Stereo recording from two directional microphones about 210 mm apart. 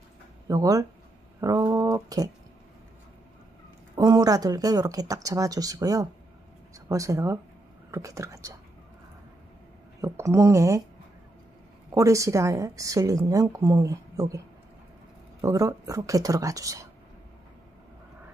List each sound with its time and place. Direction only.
0.5 s a woman's voice: 15° right (ahead or behind)
3.9 s a woman's voice: 20° right (ahead or behind)
10.0 s a woman's voice: 15° right (ahead or behind)
11.9 s a woman's voice: 15° right (ahead or behind)
15.4 s a woman's voice: 15° right (ahead or behind)